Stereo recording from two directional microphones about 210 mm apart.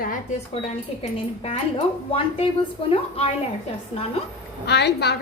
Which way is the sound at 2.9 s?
30° left (ahead or behind).